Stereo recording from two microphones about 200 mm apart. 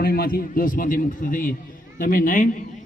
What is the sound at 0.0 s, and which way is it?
A man's voice, 50° left (ahead or behind).